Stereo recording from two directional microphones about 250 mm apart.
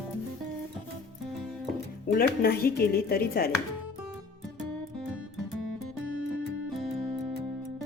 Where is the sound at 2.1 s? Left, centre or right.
Left.